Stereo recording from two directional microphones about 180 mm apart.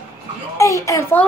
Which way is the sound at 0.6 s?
15° left (ahead or behind).